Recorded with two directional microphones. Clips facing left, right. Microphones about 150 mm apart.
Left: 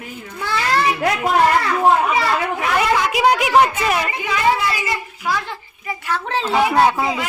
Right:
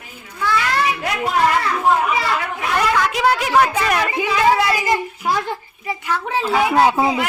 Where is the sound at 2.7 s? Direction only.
10° left (ahead or behind).